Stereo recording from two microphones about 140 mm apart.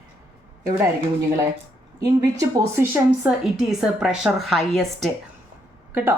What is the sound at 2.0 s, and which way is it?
Speech, 25° right (ahead or behind).